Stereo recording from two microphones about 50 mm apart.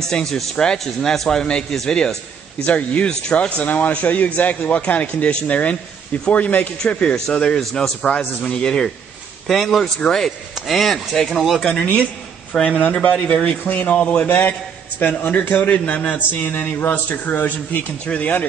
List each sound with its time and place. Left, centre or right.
0.1 s speech: centre
2.6 s speech: left
6.8 s speech: centre
9.5 s speech: centre
11.6 s speech: left
12.5 s speech: centre
13.7 s speech: left
18.0 s speech: left